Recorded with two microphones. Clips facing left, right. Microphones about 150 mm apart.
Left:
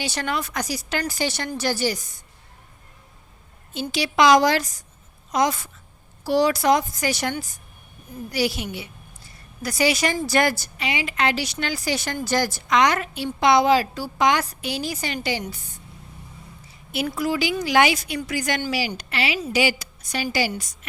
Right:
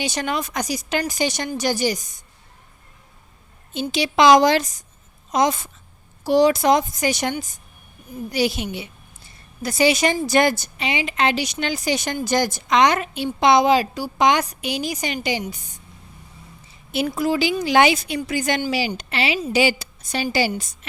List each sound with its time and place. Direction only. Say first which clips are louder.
0.0 s a woman's voice: right 2 dB; 20° right (ahead or behind)
3.7 s a woman's voice: right 3 dB; 20° right (ahead or behind)
16.9 s speech: right 3 dB; 25° right (ahead or behind)